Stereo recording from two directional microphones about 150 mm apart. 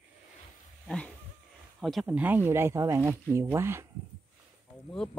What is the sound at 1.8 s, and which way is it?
Speech, centre (ahead or behind).